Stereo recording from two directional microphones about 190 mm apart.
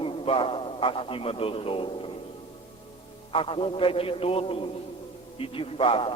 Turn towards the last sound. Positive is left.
turn(degrees=30)  # may be behind; listen again after turning